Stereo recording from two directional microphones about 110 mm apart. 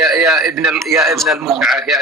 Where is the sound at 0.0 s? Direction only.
5° right (ahead or behind).